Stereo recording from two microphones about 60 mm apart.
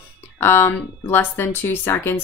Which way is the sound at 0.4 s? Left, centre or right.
Left.